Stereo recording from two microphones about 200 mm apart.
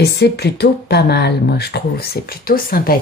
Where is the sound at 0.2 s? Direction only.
55° left (ahead or behind).